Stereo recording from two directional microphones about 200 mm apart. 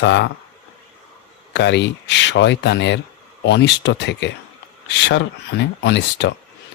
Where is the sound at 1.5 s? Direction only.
60° left (ahead or behind).